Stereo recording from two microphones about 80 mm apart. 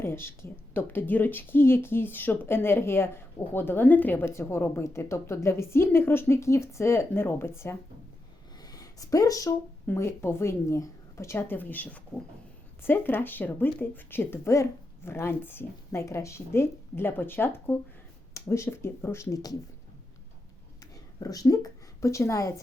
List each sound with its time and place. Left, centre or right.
0.0 s speech: left
8.5 s a sound: left
9.8 s a woman's voice: left
16.0 s a woman's voice: left
20.9 s a woman's voice: left